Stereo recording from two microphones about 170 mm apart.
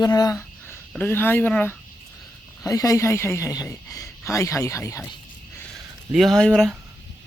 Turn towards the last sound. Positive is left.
turn(degrees=5)  # may be behind; listen again after turning